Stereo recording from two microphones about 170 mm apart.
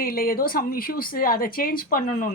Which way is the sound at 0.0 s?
60° left (ahead or behind).